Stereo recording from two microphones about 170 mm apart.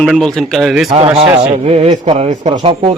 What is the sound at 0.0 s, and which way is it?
Speech, centre (ahead or behind).